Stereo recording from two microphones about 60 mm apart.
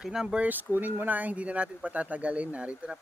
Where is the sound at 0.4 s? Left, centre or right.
Right.